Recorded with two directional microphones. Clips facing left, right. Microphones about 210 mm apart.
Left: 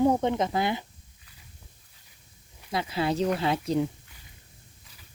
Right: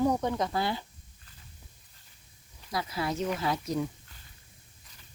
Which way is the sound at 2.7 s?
25° left (ahead or behind).